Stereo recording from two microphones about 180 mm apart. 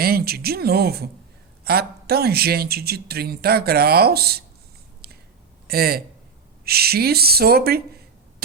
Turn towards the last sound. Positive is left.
turn(degrees=-60)  # may be behind; listen again after turning